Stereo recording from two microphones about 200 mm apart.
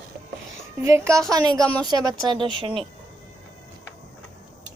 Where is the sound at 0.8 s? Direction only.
15° right (ahead or behind).